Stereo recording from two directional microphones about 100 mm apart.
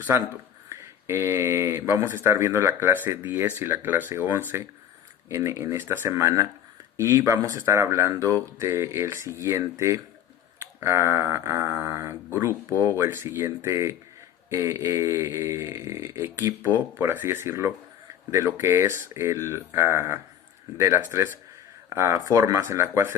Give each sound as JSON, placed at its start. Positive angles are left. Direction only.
{"t": 0.7, "sound": "speech", "side_deg": -30}